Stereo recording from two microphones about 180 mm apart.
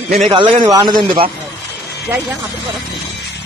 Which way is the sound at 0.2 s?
30° right (ahead or behind).